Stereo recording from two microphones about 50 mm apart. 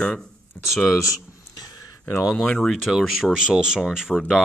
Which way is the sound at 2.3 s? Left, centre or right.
Centre.